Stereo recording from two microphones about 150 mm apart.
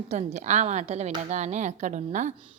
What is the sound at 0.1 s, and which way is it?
A woman's voice, 50° right (ahead or behind).